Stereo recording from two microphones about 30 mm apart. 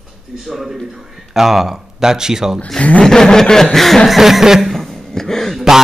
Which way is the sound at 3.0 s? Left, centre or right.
Centre.